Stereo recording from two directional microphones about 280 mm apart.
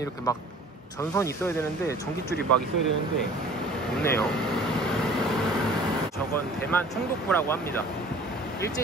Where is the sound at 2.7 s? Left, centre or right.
Right.